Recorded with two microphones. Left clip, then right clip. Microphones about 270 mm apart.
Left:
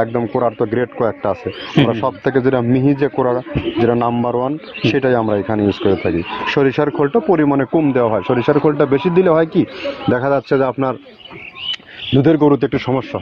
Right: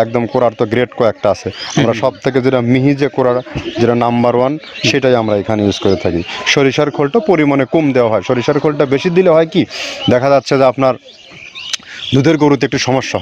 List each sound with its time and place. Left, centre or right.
0.0 s speech: right